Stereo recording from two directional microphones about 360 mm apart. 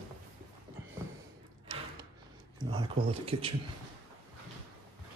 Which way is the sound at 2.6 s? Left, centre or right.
Centre.